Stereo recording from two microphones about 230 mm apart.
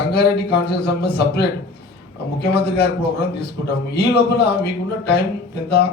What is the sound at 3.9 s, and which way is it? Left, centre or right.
A man's voice, left.